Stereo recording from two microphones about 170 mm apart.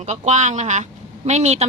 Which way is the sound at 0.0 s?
40° right (ahead or behind).